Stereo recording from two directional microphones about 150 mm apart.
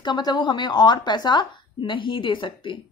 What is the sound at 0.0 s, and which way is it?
Speech, 30° left (ahead or behind).